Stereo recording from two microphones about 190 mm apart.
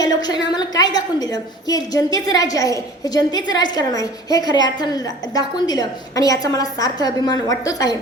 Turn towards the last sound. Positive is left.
turn(degrees=20)  # may be behind; listen again after turning